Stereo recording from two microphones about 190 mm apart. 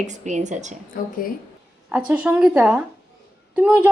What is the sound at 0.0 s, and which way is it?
Speech, 40° right (ahead or behind).